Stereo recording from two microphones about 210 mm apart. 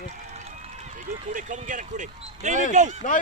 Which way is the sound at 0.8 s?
35° right (ahead or behind).